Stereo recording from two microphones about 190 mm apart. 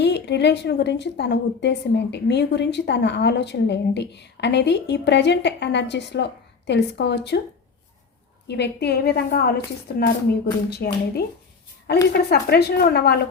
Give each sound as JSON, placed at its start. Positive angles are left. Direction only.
{"t": 0.0, "sound": "a woman's voice", "side_deg": 65}
{"t": 8.4, "sound": "a woman's voice", "side_deg": 60}